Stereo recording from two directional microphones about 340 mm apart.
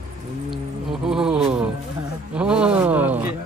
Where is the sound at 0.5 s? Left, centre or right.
Centre.